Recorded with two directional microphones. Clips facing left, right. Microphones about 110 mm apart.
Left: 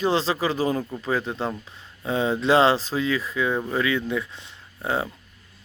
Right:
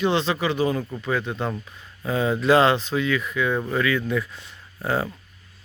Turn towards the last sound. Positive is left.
turn(degrees=20)  # may be behind; listen again after turning